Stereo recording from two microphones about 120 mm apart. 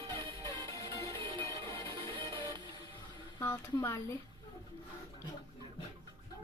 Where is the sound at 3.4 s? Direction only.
20° left (ahead or behind).